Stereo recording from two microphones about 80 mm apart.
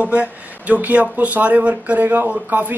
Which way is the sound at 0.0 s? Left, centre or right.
Centre.